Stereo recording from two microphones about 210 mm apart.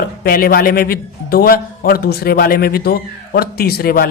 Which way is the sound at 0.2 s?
45° left (ahead or behind).